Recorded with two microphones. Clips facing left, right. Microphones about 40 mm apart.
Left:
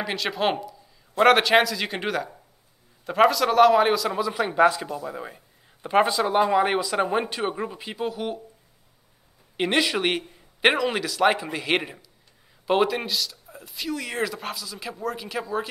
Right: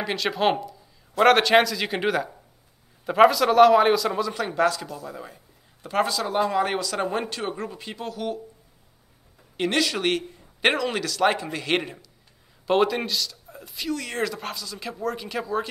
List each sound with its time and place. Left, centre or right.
0.0 s speech: centre
4.3 s a man's voice: centre
9.6 s a man's voice: centre